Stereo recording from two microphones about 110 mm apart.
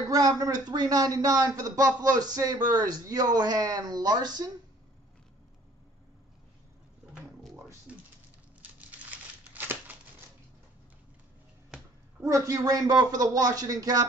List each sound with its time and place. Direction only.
0.1 s speech: 35° right (ahead or behind)
9.1 s crumpling: 15° right (ahead or behind)
12.2 s speech: 25° right (ahead or behind)